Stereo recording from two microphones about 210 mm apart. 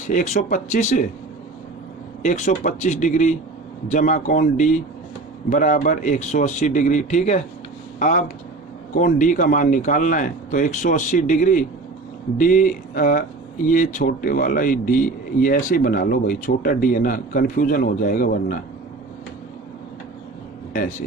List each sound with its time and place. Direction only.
0.1 s a man's voice: 35° left (ahead or behind)
2.2 s a man's voice: 35° left (ahead or behind)